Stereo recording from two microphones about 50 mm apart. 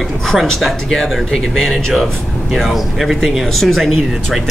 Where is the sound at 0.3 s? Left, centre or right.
Centre.